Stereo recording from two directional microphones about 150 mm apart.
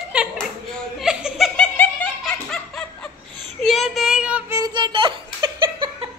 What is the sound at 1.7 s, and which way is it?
Snicker, 10° left (ahead or behind).